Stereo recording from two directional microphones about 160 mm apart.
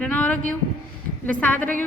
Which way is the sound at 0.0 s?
10° left (ahead or behind).